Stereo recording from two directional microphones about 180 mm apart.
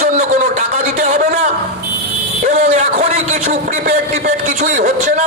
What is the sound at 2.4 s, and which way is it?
A man's voice, 40° right (ahead or behind).